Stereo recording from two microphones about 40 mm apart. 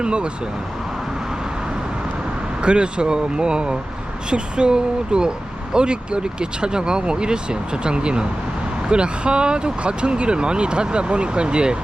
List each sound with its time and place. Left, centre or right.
0.0 s speech: right
2.6 s speech: right